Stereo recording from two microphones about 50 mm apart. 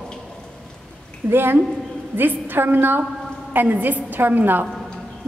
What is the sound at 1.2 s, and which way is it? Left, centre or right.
A woman's voice, right.